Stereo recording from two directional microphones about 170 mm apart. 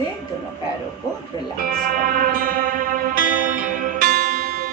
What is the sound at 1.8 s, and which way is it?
Music, 55° right (ahead or behind).